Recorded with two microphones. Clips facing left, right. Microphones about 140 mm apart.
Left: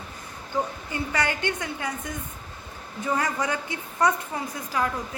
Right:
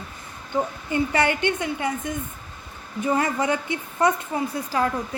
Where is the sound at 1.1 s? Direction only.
25° right (ahead or behind).